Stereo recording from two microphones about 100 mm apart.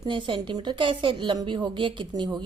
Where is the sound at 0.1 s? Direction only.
55° right (ahead or behind).